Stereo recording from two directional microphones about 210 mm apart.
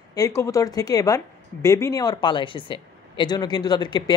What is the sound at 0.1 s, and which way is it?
A woman's voice, 15° left (ahead or behind).